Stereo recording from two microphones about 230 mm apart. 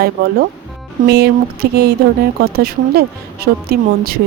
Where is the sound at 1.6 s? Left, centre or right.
Right.